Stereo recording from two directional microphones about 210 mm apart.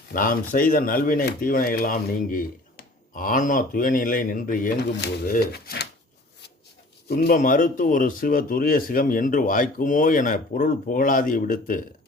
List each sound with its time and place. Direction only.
0.1 s speech: 40° left (ahead or behind)
7.1 s speech: 45° left (ahead or behind)